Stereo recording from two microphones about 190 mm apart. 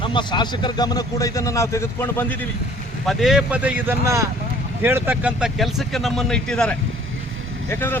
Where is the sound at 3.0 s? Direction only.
Centre (ahead or behind).